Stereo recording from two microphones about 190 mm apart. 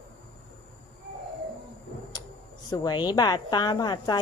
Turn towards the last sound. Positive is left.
turn(degrees=20)  # may be behind; listen again after turning